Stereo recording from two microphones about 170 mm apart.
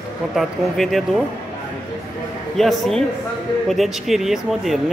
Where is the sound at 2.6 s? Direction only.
Centre (ahead or behind).